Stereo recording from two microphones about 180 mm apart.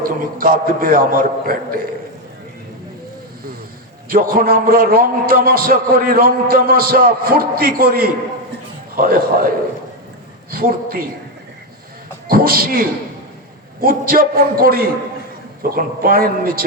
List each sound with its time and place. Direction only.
0.0 s a man's voice: 55° right (ahead or behind)
4.1 s a man's voice: 55° right (ahead or behind)
10.5 s a man's voice: 55° right (ahead or behind)
12.3 s a man's voice: 55° right (ahead or behind)
13.8 s a man's voice: 55° right (ahead or behind)